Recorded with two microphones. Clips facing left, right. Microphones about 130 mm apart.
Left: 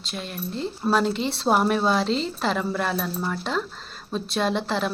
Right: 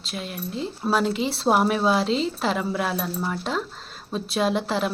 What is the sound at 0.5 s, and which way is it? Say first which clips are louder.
A woman's voice: left 1 dB; centre (ahead or behind).